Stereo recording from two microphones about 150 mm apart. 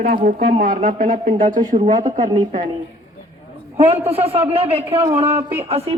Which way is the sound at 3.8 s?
45° right (ahead or behind).